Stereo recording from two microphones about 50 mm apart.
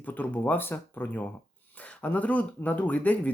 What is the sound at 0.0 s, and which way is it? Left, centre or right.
Speech, left.